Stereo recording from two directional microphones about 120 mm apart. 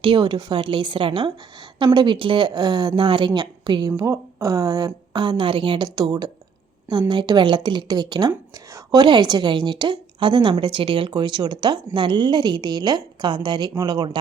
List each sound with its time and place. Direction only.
0.0 s a woman's voice: 45° right (ahead or behind)